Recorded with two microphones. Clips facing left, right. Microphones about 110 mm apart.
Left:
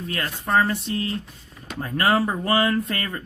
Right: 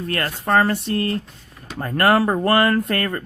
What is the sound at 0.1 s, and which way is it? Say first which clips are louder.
Speech: right 3 dB; 65° right (ahead or behind).